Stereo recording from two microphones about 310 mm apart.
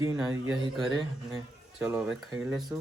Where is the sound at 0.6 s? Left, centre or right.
Centre.